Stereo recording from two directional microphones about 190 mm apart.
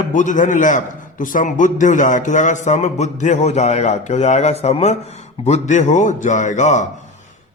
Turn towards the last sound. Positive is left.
turn(degrees=40)  # may be behind; listen again after turning